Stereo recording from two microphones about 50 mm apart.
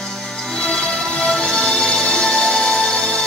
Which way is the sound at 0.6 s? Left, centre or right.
Centre.